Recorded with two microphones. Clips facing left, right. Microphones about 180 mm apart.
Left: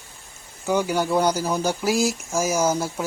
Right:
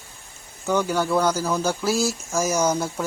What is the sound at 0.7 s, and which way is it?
Speech, 10° left (ahead or behind).